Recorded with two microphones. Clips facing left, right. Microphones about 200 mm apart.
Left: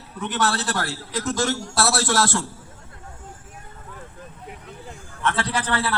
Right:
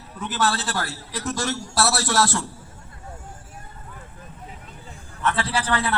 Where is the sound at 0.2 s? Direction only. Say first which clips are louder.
Left 1 dB; 70° left (ahead or behind); by 2.4 s 50° left (ahead or behind).